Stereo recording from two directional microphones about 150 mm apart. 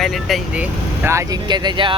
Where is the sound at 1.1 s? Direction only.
25° right (ahead or behind).